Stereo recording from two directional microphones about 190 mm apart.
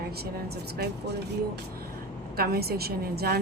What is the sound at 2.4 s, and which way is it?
A woman's voice, 55° right (ahead or behind).